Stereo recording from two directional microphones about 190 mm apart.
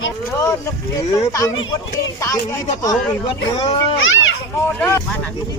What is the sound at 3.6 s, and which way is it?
Speech, 25° left (ahead or behind).